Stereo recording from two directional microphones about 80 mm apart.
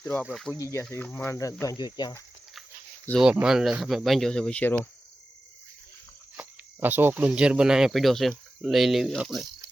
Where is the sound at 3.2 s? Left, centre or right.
Centre.